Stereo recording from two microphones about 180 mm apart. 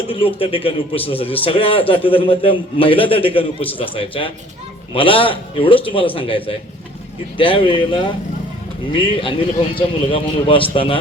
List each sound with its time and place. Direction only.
0.1 s a man's voice: 30° left (ahead or behind)